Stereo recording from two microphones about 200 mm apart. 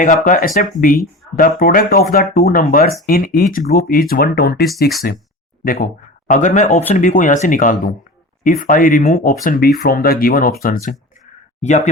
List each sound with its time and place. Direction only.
0.0 s speech: 40° left (ahead or behind)